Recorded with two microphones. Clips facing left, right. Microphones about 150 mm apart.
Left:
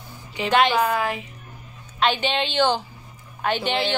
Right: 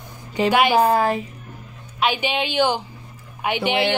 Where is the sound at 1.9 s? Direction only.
10° right (ahead or behind).